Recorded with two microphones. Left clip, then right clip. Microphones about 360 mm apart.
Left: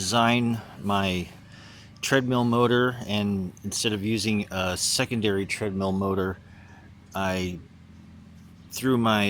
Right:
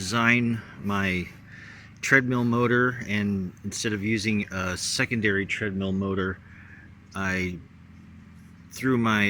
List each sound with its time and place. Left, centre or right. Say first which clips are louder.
0.0 s speech: even; centre
8.7 s speech: left 1 dB; centre